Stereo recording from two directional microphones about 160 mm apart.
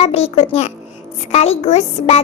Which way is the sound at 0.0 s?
40° left (ahead or behind).